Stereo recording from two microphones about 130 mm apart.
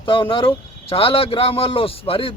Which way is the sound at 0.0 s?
40° left (ahead or behind).